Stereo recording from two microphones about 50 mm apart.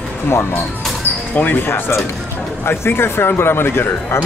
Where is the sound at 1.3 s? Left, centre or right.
Left.